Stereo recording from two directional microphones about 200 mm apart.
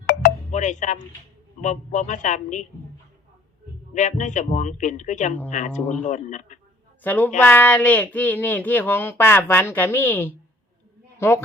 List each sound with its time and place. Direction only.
0.0 s music: 45° left (ahead or behind)
1.6 s speech: 35° left (ahead or behind)
3.9 s speech: 35° left (ahead or behind)
7.0 s a woman's voice: 10° left (ahead or behind)